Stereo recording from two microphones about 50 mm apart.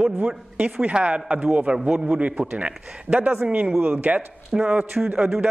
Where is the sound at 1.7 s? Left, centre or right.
Centre.